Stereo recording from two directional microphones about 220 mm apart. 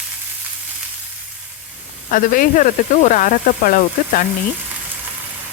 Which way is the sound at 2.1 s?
40° left (ahead or behind).